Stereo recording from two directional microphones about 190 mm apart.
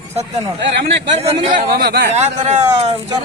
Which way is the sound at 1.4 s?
40° right (ahead or behind).